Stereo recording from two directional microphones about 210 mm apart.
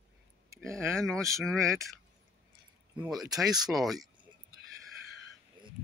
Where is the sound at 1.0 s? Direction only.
Centre (ahead or behind).